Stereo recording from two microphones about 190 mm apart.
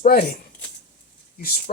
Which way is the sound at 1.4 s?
55° left (ahead or behind).